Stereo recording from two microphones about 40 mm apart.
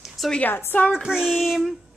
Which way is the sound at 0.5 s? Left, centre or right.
Left.